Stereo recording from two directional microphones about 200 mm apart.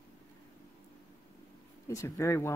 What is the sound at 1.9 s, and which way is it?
Speech, 15° left (ahead or behind).